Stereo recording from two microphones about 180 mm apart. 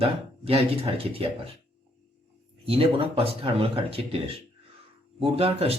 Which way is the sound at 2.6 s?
30° right (ahead or behind).